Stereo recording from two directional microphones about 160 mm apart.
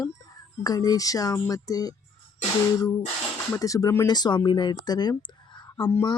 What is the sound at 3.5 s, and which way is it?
Speech, 20° left (ahead or behind).